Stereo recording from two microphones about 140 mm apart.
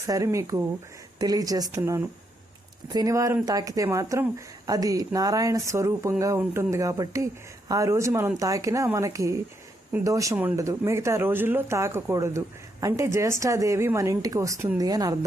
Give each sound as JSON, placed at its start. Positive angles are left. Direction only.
{"t": 0.0, "sound": "speech", "side_deg": -20}
{"t": 1.8, "sound": "speech", "side_deg": -15}